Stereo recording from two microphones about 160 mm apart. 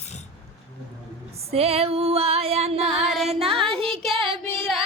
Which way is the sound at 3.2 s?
40° right (ahead or behind).